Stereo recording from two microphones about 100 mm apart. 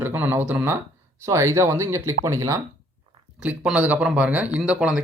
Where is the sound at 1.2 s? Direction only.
30° right (ahead or behind).